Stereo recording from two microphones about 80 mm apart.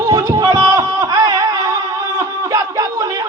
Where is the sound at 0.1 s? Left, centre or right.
Right.